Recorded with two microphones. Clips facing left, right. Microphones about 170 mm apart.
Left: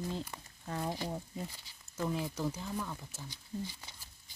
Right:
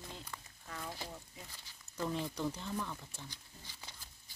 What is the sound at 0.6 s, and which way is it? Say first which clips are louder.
Speech: left 9 dB; 35° left (ahead or behind).